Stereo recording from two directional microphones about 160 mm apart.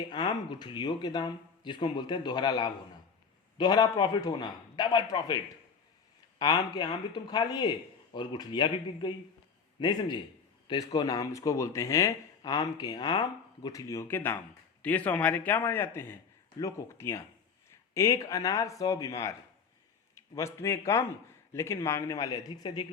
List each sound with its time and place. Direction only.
0.1 s speech: 30° left (ahead or behind)
6.4 s a man's voice: 25° left (ahead or behind)